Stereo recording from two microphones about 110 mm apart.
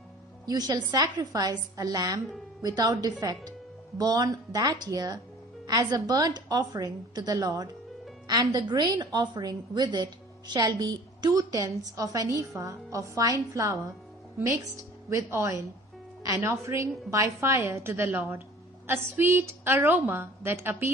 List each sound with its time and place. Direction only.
0.4 s a woman's voice: 35° right (ahead or behind)